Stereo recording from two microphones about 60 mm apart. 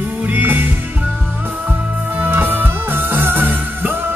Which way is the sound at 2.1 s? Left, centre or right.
Right.